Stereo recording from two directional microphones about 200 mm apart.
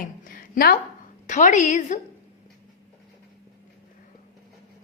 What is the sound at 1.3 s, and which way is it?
Speech, 40° left (ahead or behind).